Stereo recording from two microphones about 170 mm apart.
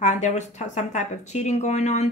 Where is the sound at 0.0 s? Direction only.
45° left (ahead or behind).